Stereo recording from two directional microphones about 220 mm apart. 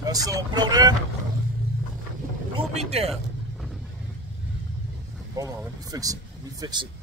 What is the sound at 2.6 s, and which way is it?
Speech, 30° right (ahead or behind).